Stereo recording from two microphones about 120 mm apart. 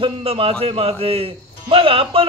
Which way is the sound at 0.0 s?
50° right (ahead or behind).